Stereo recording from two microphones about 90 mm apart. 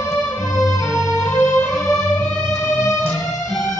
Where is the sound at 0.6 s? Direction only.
35° left (ahead or behind).